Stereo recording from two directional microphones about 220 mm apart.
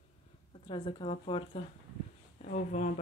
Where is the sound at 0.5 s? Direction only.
20° left (ahead or behind).